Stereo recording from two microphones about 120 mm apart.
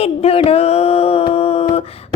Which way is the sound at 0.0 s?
55° left (ahead or behind).